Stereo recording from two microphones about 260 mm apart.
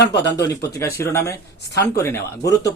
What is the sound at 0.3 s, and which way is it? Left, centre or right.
A man's voice, centre.